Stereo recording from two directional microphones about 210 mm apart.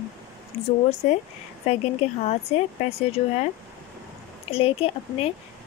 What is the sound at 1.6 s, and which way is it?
Speech, 30° left (ahead or behind).